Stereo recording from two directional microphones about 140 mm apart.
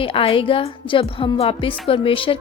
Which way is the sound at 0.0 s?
40° left (ahead or behind).